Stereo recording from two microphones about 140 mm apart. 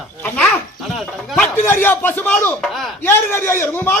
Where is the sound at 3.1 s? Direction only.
15° left (ahead or behind).